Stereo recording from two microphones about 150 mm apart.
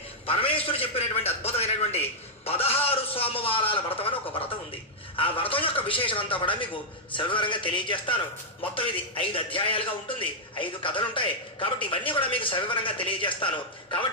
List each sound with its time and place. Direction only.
0.3 s a man's voice: 40° left (ahead or behind)
2.4 s a sound: 40° left (ahead or behind)
5.1 s a man's voice: 35° left (ahead or behind)